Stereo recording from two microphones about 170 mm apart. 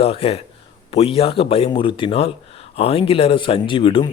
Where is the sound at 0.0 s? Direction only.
35° left (ahead or behind).